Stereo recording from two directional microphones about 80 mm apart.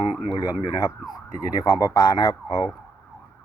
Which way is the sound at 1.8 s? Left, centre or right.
Left.